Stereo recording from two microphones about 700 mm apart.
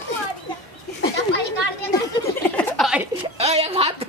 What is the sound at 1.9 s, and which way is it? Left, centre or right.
Speech, centre.